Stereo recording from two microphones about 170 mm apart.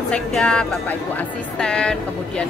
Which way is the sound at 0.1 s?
5° left (ahead or behind).